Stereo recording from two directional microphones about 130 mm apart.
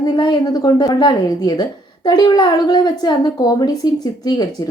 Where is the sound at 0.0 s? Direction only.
30° left (ahead or behind).